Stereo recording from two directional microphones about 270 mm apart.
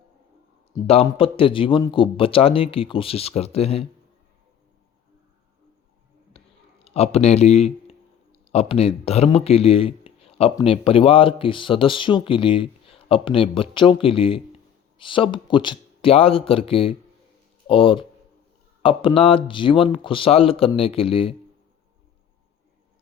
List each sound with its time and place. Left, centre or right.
0.7 s speech: left
6.3 s a sound: left
8.3 s speech: left